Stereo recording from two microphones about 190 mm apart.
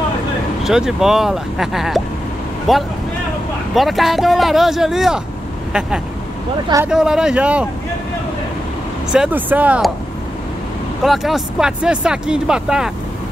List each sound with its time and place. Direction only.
0.7 s speech: centre (ahead or behind)
9.1 s speech: 5° right (ahead or behind)
11.1 s speech: centre (ahead or behind)